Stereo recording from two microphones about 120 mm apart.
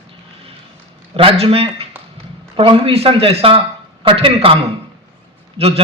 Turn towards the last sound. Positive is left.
turn(degrees=-55)  # may be behind; listen again after turning